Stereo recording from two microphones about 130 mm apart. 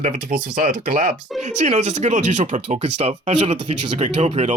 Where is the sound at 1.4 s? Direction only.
60° right (ahead or behind).